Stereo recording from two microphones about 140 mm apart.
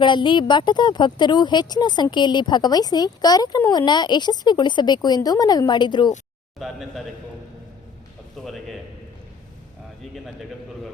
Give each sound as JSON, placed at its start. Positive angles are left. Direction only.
{"t": 0.0, "sound": "speech", "side_deg": 35}
{"t": 6.6, "sound": "a man's voice", "side_deg": 0}
{"t": 8.4, "sound": "a man's voice", "side_deg": 0}